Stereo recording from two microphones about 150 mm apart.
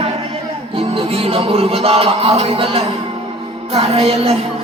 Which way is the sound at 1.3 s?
40° right (ahead or behind).